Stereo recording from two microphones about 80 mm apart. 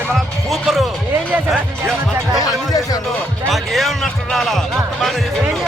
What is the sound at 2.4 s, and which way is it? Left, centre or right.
Speech, left.